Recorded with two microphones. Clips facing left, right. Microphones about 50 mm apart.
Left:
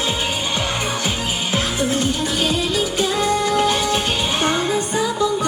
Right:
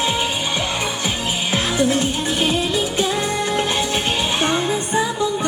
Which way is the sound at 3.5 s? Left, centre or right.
Right.